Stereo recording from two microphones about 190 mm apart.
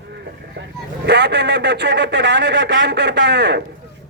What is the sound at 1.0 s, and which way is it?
A man's voice, 65° right (ahead or behind).